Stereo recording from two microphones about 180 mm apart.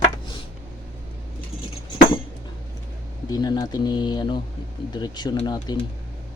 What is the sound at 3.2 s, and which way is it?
Speech, 20° left (ahead or behind).